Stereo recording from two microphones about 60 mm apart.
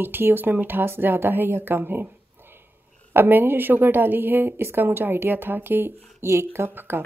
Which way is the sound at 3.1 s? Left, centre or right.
Right.